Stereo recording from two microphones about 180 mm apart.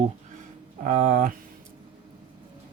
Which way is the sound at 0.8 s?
45° right (ahead or behind).